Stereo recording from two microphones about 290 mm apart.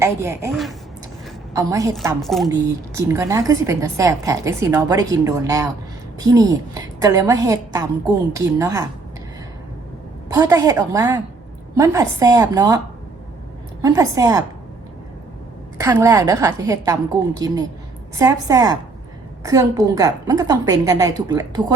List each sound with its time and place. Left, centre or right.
0.0 s a woman's voice: centre
2.2 s a woman's voice: centre
2.5 s a woman's voice: centre
10.3 s a woman's voice: centre
13.8 s a woman's voice: centre
15.8 s a woman's voice: centre